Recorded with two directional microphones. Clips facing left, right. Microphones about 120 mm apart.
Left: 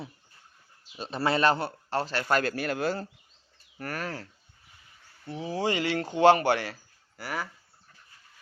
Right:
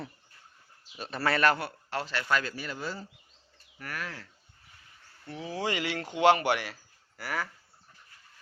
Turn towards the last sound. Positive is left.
turn(degrees=20)  # may be behind; listen again after turning